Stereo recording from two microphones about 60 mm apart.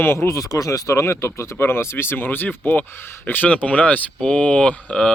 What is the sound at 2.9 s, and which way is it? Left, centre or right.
Speech, left.